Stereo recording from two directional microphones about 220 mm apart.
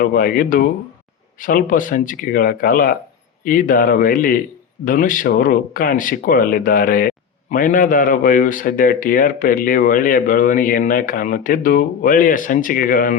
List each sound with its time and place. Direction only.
0.0 s a man's voice: 40° left (ahead or behind)